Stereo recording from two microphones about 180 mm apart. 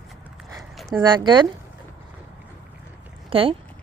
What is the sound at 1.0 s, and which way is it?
Speech, 25° right (ahead or behind).